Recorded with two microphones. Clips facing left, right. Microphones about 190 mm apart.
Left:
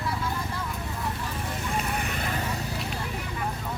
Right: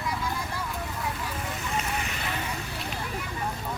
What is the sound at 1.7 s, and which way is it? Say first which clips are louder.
Vehicle: left 1 dB; 50° left (ahead or behind).